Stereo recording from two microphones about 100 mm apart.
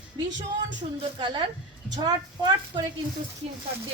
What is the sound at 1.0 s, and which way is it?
Speech, 55° right (ahead or behind).